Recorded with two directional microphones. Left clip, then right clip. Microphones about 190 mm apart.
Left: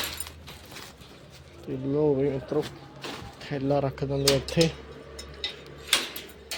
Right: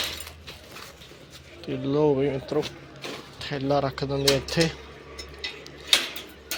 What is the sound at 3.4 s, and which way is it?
Speech, 20° left (ahead or behind).